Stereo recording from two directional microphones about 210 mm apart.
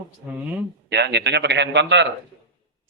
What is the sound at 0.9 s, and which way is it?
A man's voice, 55° right (ahead or behind).